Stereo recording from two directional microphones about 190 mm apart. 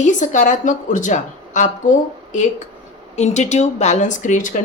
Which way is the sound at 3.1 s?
35° left (ahead or behind).